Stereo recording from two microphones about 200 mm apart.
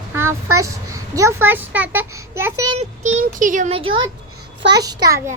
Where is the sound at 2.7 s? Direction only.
35° right (ahead or behind); by 5.3 s 15° right (ahead or behind).